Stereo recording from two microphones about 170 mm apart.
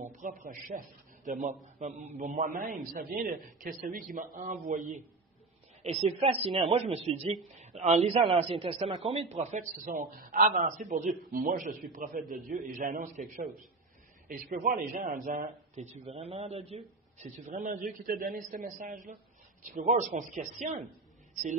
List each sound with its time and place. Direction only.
0.0 s a man's voice: 50° right (ahead or behind)
5.8 s a man's voice: 40° right (ahead or behind)